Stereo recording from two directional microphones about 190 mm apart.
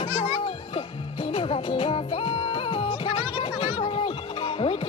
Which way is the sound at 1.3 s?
30° left (ahead or behind).